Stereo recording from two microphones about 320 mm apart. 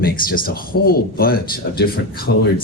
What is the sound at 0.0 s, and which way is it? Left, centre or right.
Speech, left.